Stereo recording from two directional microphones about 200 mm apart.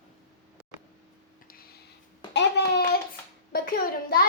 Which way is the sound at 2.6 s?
60° left (ahead or behind).